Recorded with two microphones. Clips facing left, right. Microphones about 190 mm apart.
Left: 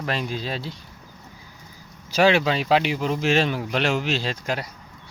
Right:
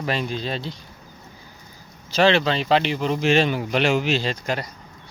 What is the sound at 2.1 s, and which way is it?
Speech, 10° left (ahead or behind).